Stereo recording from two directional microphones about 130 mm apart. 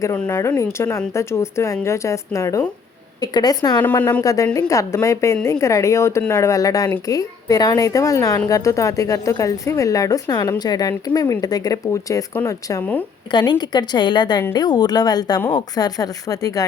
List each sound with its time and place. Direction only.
0.3 s speech: 20° left (ahead or behind)
12.3 s speech: 15° left (ahead or behind)
13.3 s speech: 35° left (ahead or behind)